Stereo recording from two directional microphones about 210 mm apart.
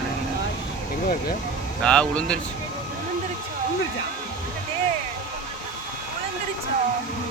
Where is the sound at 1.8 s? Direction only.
5° left (ahead or behind).